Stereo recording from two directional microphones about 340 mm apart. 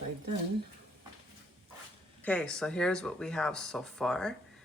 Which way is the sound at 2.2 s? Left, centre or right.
Centre.